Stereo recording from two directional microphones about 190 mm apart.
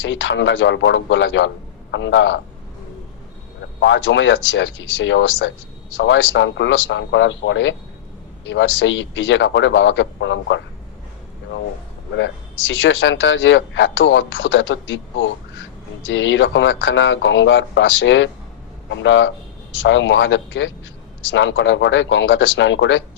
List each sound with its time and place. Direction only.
0.0 s a man's voice: 80° left
3.8 s a man's voice: 75° left (ahead or behind)
12.1 s a man's voice: 75° left (ahead or behind)